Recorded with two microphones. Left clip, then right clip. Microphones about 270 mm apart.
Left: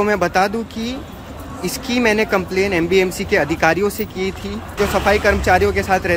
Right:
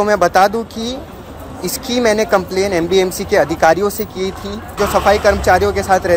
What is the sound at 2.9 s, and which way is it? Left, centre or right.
Speech, centre.